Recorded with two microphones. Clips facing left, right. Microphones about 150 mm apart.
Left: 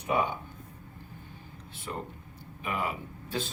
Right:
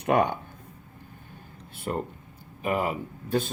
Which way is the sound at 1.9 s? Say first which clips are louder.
Right 7 dB; 50° right (ahead or behind).